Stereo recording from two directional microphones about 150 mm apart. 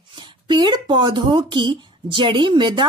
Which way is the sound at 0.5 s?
30° right (ahead or behind).